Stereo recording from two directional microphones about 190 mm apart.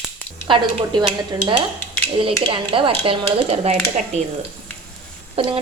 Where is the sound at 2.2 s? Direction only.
25° right (ahead or behind).